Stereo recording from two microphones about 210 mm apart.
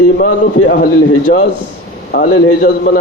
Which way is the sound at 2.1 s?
55° left (ahead or behind).